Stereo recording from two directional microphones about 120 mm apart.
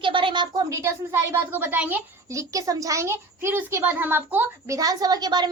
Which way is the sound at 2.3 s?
25° right (ahead or behind).